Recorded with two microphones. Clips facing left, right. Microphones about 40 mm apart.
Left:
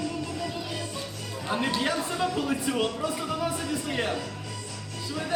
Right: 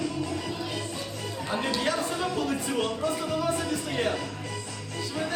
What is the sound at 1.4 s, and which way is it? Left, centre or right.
Speech, centre.